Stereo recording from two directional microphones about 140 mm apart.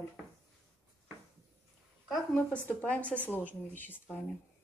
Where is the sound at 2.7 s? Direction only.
10° left (ahead or behind).